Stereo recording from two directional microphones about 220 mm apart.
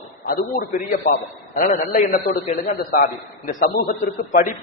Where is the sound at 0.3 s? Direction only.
40° left (ahead or behind).